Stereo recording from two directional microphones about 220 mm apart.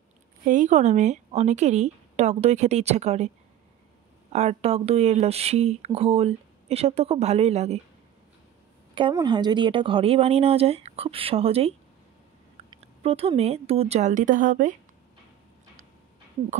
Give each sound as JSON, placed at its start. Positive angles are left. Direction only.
{"t": 0.5, "sound": "speech", "side_deg": -35}
{"t": 4.3, "sound": "speech", "side_deg": -30}
{"t": 8.9, "sound": "a woman's voice", "side_deg": -20}